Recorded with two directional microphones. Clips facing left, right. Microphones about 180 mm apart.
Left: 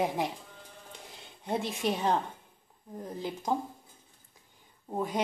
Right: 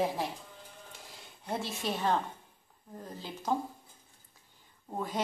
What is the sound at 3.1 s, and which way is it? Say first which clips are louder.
Speech: left 4 dB; 15° left (ahead or behind).